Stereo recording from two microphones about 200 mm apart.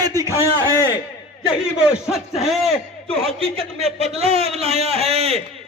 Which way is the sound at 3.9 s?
30° right (ahead or behind).